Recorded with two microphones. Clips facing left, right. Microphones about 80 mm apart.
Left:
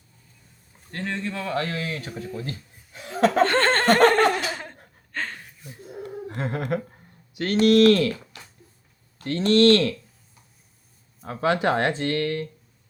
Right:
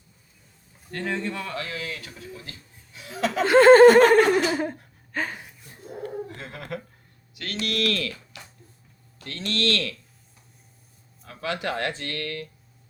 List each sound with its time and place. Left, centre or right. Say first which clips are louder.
1.0 s speech: even; centre
1.5 s speech: left 5 dB; left
3.4 s laughter: right 8 dB; centre
6.2 s a sound: left 9 dB; left
7.6 s speech: left 11 dB; left
11.2 s speech: left 8 dB; left